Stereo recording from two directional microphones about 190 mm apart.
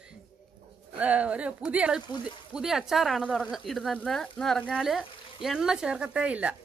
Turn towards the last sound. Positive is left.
turn(degrees=-5)  # may be behind; listen again after turning